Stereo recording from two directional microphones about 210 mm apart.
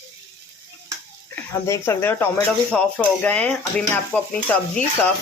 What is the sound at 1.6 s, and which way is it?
Speech, 15° left (ahead or behind).